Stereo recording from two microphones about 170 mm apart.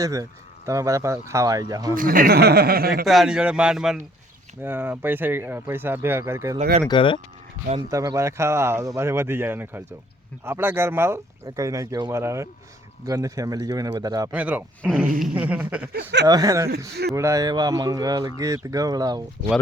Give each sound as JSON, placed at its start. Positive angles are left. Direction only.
{"t": 0.0, "sound": "speech", "side_deg": -20}
{"t": 2.0, "sound": "speech", "side_deg": -55}
{"t": 3.1, "sound": "speech", "side_deg": 0}
{"t": 6.8, "sound": "speech", "side_deg": 30}
{"t": 7.8, "sound": "speech", "side_deg": -20}
{"t": 14.3, "sound": "speech", "side_deg": -10}
{"t": 15.9, "sound": "speech", "side_deg": -65}
{"t": 16.2, "sound": "speech", "side_deg": -20}
{"t": 16.6, "sound": "a man's voice", "side_deg": -70}
{"t": 17.2, "sound": "speech", "side_deg": -20}